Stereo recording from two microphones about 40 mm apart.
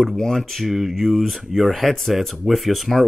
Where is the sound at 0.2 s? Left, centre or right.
Centre.